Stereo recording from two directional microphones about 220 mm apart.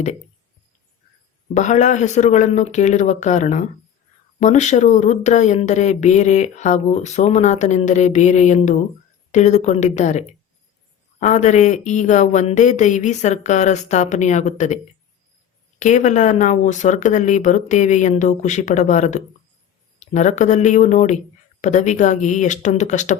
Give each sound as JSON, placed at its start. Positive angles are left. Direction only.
{"t": 1.5, "sound": "speech", "side_deg": 35}
{"t": 15.8, "sound": "speech", "side_deg": 35}